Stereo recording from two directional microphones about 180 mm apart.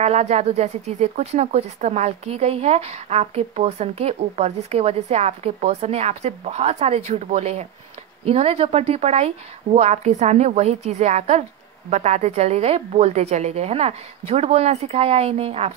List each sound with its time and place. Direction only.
0.0 s speech: 40° right (ahead or behind)